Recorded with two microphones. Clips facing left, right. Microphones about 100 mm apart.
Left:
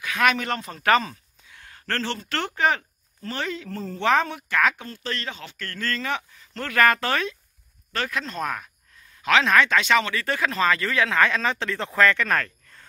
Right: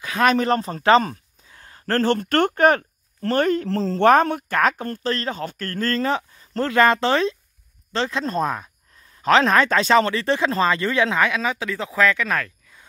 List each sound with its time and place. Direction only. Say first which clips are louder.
0.0 s speech: right 4 dB; 35° right (ahead or behind); by 3.6 s 50° right (ahead or behind)
3.6 s a woman's voice: right 10 dB; 85° right
4.0 s speech: right 6 dB; 50° right (ahead or behind); by 8.6 s 25° right (ahead or behind)
9.2 s speech: right 3 dB; 40° right (ahead or behind); by 12.8 s centre (ahead or behind)